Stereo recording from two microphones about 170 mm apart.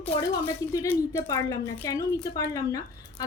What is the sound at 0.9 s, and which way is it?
A woman's voice, 20° left (ahead or behind).